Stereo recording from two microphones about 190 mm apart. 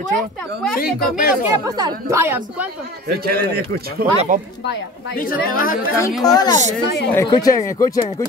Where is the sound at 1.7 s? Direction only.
20° right (ahead or behind).